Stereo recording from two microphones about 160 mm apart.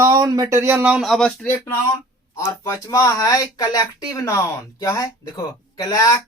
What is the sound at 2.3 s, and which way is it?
Speech, 20° left (ahead or behind).